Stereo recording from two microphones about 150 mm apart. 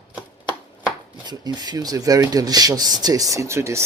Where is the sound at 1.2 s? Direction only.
30° right (ahead or behind).